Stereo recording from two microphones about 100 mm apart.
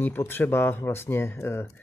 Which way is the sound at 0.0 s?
20° left (ahead or behind).